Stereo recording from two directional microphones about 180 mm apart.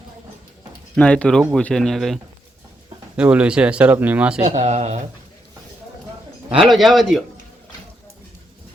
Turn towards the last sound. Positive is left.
turn(degrees=0)  # may be behind; listen again after turning